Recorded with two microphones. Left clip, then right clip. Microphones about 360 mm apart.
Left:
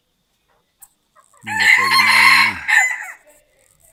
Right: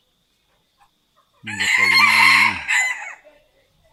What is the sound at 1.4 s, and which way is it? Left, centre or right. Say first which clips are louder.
Chicken: left 4 dB; centre.